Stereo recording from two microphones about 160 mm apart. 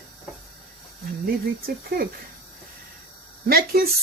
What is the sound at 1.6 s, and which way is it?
Speech, 70° right (ahead or behind).